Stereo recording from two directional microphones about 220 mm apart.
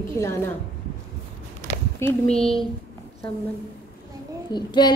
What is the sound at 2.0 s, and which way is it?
Speech, 5° left (ahead or behind).